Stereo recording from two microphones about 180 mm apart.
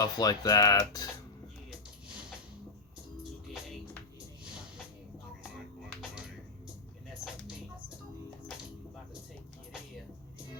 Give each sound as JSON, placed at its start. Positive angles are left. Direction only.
{"t": 0.0, "sound": "speech", "side_deg": 20}